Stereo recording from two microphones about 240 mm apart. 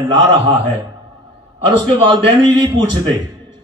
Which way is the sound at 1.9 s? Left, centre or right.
Centre.